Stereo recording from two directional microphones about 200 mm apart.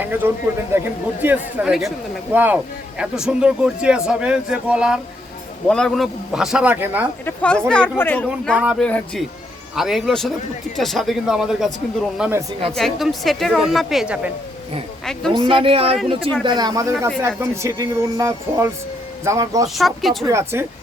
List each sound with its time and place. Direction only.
0.0 s speech: 10° right (ahead or behind)
7.3 s speech: 5° left (ahead or behind)
8.5 s speech: 5° right (ahead or behind)
15.3 s speech: 25° right (ahead or behind)
19.6 s speech: centre (ahead or behind)
20.2 s speech: 15° right (ahead or behind)